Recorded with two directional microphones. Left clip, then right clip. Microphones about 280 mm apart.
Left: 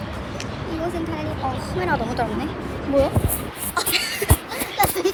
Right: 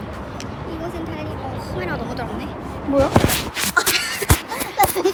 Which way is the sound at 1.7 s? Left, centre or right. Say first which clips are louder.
Left 4 dB; centre.